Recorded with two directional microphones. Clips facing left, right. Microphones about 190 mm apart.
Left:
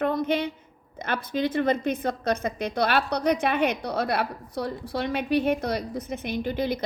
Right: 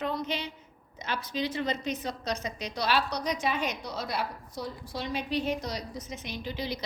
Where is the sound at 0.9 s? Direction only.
55° left (ahead or behind).